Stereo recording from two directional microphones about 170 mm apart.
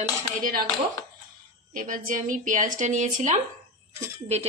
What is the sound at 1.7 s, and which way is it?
A woman's voice, 50° right (ahead or behind).